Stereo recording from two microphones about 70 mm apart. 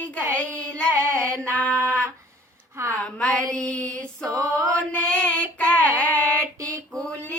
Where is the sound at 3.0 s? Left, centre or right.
Centre.